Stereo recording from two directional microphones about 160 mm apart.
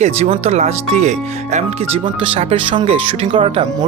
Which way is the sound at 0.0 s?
40° right (ahead or behind).